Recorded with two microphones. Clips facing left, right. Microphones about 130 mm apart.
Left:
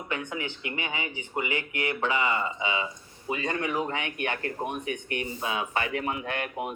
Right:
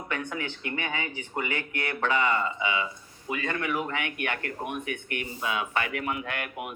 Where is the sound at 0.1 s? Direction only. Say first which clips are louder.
Even; 20° left (ahead or behind).